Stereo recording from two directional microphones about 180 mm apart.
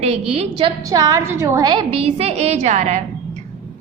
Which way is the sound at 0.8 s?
20° right (ahead or behind).